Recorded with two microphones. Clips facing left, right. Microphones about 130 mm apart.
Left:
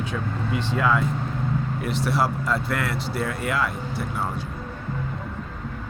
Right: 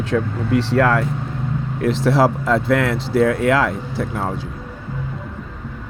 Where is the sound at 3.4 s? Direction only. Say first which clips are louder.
Right 9 dB; 90° right.